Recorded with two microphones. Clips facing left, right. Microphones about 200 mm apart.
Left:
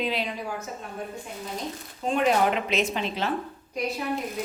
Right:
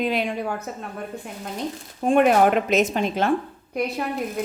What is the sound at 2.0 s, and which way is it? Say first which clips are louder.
Speech: right 6 dB; 55° right (ahead or behind).